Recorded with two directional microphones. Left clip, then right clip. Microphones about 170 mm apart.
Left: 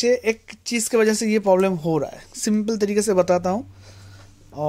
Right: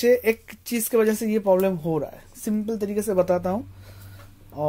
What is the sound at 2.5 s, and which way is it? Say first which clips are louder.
Speech: left 5 dB; 40° left (ahead or behind).